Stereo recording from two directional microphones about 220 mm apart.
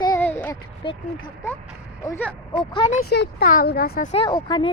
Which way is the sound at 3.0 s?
50° left (ahead or behind).